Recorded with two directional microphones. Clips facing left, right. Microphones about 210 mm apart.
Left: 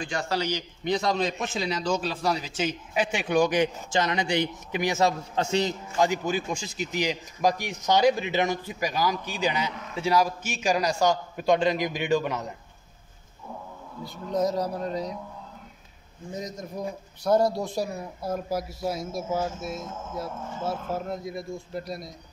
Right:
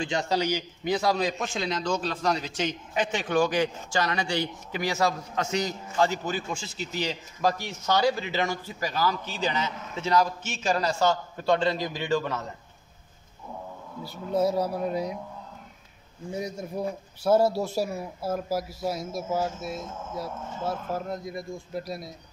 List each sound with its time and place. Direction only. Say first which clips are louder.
0.0 s a man's voice: right 2 dB; 20° right (ahead or behind); by 5.8 s 30° left (ahead or behind)
5.9 s a man's voice: left 1 dB; 15° left (ahead or behind)
14.0 s speech: right 1 dB; 5° right (ahead or behind)
16.3 s speech: right 2 dB; 10° right (ahead or behind)